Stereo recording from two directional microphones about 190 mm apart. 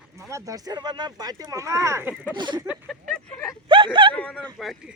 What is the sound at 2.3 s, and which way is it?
Speech, 25° right (ahead or behind).